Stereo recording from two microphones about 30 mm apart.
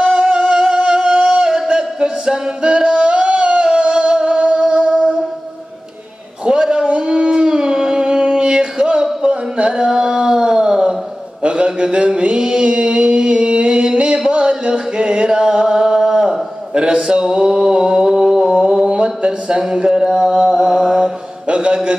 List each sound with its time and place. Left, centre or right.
0.0 s music: right
4.6 s music: right
6.4 s a sound: right
13.8 s music: right
18.5 s mantra: right
21.5 s a sound: right